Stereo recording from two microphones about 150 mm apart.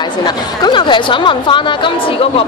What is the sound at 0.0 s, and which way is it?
A woman's voice, 30° left (ahead or behind).